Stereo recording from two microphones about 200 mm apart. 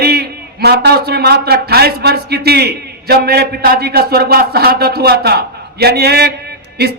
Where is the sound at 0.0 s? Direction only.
55° right (ahead or behind).